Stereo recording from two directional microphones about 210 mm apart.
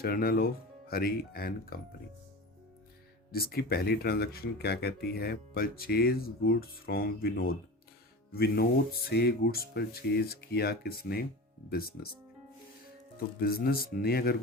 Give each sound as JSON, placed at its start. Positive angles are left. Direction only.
{"t": 0.0, "sound": "speech", "side_deg": 45}
{"t": 3.3, "sound": "speech", "side_deg": 45}
{"t": 13.1, "sound": "speech", "side_deg": 45}